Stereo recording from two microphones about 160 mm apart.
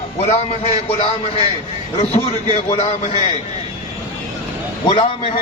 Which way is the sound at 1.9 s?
40° left (ahead or behind).